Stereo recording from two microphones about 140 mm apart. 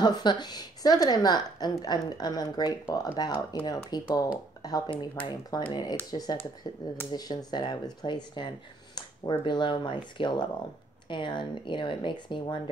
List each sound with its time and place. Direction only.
0.0 s a woman's voice: 30° left (ahead or behind)
8.9 s a sound: 30° left (ahead or behind)
9.4 s speech: 35° left (ahead or behind)